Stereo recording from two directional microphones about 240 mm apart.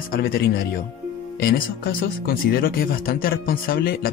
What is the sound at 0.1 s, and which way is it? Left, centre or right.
Speech, left.